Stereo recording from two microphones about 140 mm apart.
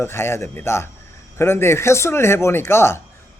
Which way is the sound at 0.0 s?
15° left (ahead or behind).